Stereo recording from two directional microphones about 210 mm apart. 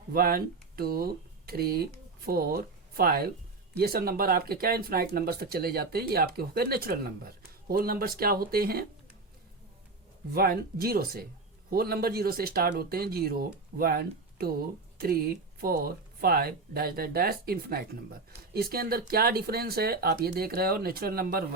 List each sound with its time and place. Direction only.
0.1 s speech: 45° right (ahead or behind)
10.3 s speech: 45° right (ahead or behind)